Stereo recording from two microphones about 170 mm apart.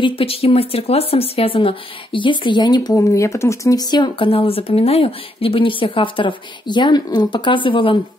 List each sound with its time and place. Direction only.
0.0 s speech: 35° left (ahead or behind)